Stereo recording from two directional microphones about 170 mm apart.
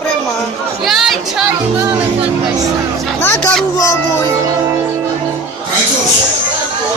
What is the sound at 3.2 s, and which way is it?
Speech, 15° left (ahead or behind).